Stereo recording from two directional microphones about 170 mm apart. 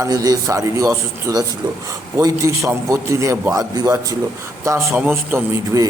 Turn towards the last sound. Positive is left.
turn(degrees=-15)  # may be behind; listen again after turning